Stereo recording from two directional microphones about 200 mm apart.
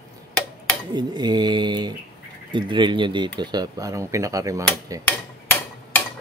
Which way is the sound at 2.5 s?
25° right (ahead or behind).